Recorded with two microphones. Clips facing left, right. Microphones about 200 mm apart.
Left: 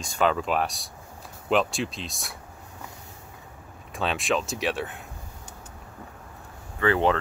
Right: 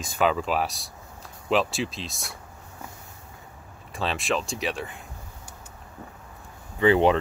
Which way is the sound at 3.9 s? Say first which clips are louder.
Left 1 dB; centre (ahead or behind).